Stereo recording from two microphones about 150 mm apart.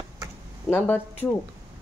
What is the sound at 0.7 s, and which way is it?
Speech, 15° left (ahead or behind).